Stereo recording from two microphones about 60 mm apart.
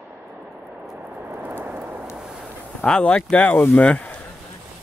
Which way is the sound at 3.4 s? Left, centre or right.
Left.